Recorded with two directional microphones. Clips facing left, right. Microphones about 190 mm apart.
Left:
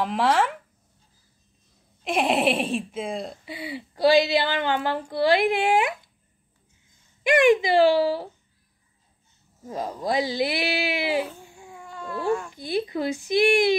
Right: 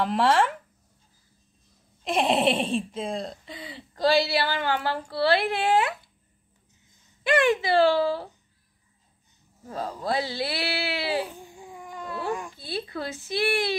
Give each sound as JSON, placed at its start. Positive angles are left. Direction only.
{"t": 0.0, "sound": "speech", "side_deg": 0}
{"t": 2.0, "sound": "speech", "side_deg": 0}
{"t": 7.2, "sound": "speech", "side_deg": 15}
{"t": 9.7, "sound": "speech", "side_deg": 15}
{"t": 11.2, "sound": "babbling", "side_deg": -15}
{"t": 12.3, "sound": "speech", "side_deg": -15}
{"t": 12.5, "sound": "speech", "side_deg": 15}